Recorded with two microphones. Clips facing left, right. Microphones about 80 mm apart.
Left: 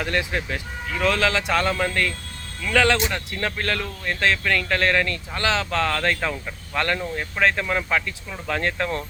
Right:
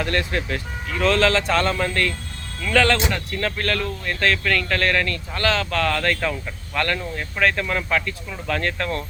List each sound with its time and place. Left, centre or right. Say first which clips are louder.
0.0 s speech: right 1 dB; centre